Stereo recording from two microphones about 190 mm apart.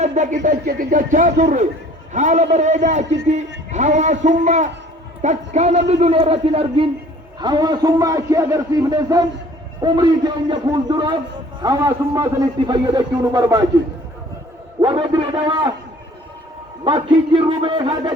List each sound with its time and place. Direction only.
0.0 s a sound: 40° right (ahead or behind)
0.5 s a man's voice: 55° right (ahead or behind); by 13.7 s 20° right (ahead or behind)
14.8 s a man's voice: 20° right (ahead or behind)
16.8 s a man's voice: 25° right (ahead or behind)